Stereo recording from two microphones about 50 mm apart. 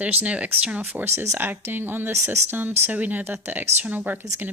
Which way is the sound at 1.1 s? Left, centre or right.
Right.